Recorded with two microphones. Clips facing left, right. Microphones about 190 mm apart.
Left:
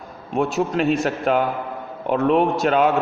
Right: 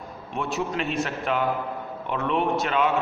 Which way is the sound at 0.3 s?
45° left (ahead or behind).